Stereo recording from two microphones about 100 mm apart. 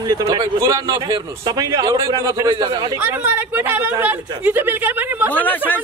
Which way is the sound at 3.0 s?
15° right (ahead or behind).